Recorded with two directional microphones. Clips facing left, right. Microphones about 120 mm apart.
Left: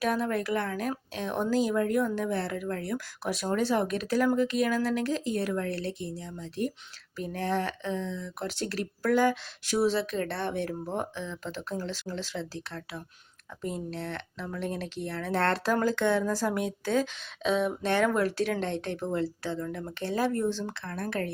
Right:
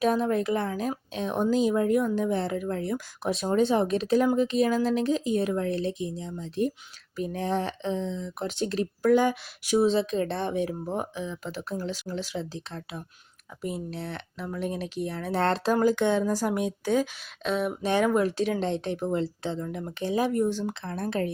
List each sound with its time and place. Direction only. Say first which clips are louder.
0.0 s speech: right 4 dB; 20° right (ahead or behind)
17.4 s speech: left 1 dB; centre (ahead or behind)
17.8 s speech: right 4 dB; 15° right (ahead or behind)